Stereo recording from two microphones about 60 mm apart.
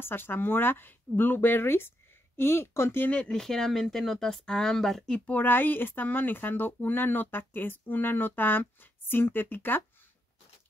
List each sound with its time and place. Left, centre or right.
0.0 s speech: left
3.3 s speech: centre
5.1 s speech: left
5.4 s speech: left